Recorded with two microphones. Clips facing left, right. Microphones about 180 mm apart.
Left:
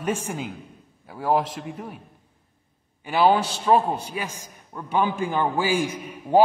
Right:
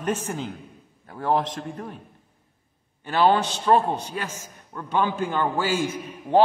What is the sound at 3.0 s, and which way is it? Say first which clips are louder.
A man's voice: left 1 dB; 10° left (ahead or behind).